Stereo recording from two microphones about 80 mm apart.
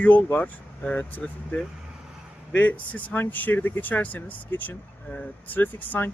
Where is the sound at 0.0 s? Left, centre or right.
Centre.